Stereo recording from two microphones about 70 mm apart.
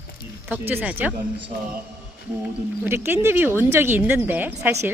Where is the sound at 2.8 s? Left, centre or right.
Right.